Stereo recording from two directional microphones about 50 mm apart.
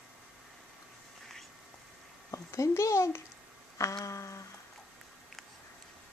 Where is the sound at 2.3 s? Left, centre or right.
Left.